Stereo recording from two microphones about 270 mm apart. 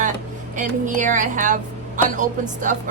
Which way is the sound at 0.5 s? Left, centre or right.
Right.